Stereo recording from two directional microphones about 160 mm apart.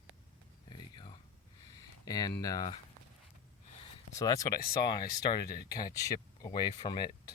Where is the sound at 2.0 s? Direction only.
25° left (ahead or behind).